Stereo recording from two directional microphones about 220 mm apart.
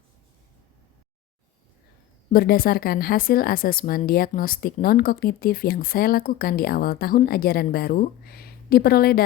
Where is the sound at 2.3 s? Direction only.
40° left (ahead or behind).